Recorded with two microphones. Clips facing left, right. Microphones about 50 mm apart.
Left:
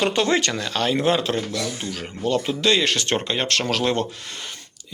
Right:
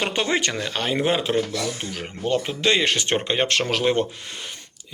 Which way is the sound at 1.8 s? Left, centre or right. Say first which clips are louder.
Left 1 dB; right.